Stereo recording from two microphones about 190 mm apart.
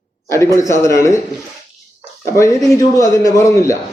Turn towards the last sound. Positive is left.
turn(degrees=15)  # may be behind; listen again after turning